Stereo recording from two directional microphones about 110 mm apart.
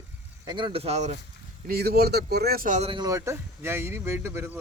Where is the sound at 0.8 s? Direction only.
85° right.